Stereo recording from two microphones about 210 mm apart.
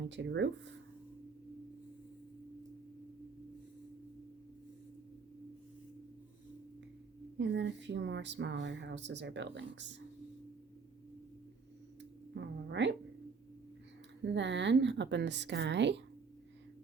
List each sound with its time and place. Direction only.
0.1 s speech: 55° right (ahead or behind)
7.3 s speech: 60° right (ahead or behind)
12.3 s speech: 55° right (ahead or behind)
14.3 s speech: 60° right (ahead or behind)